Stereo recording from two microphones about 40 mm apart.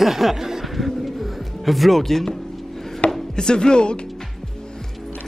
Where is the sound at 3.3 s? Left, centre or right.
Centre.